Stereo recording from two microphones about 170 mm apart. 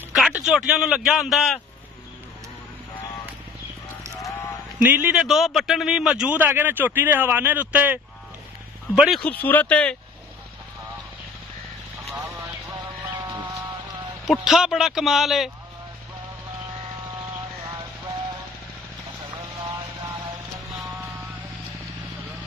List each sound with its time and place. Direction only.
0.1 s a sound: centre (ahead or behind)
0.5 s speech: 5° right (ahead or behind)
4.7 s a man's voice: 10° right (ahead or behind)
9.2 s speech: 10° left (ahead or behind)
13.1 s music: 25° right (ahead or behind)
14.2 s speech: centre (ahead or behind)